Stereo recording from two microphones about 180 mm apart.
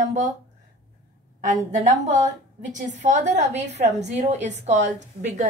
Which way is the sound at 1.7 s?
40° right (ahead or behind).